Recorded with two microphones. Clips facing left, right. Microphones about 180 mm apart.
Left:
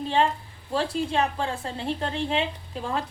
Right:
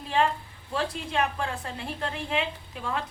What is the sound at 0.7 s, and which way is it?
A woman's voice, 30° left (ahead or behind).